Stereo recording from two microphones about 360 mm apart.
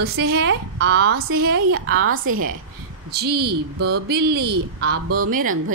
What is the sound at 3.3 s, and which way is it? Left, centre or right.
Speech, right.